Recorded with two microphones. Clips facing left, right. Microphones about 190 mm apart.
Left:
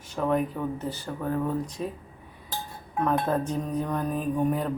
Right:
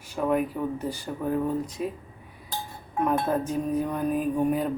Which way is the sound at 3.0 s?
10° right (ahead or behind).